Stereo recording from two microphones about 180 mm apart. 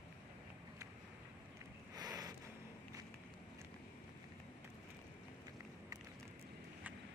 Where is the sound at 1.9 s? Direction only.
20° right (ahead or behind).